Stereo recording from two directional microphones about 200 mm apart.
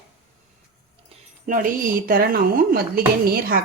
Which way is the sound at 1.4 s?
45° right (ahead or behind).